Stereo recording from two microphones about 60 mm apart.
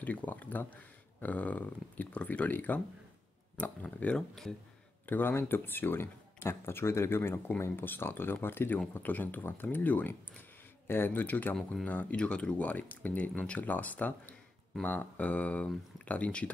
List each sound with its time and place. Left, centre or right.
0.0 s speech: left
5.0 s speech: left
12.2 s speech: centre